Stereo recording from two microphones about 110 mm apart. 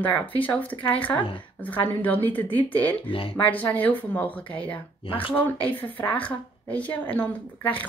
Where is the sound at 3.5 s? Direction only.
15° left (ahead or behind).